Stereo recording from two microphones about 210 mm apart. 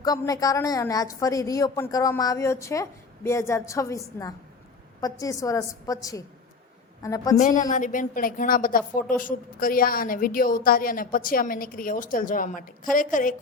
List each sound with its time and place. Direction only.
0.0 s a woman's voice: 15° left (ahead or behind)
7.3 s a woman's voice: 35° left (ahead or behind)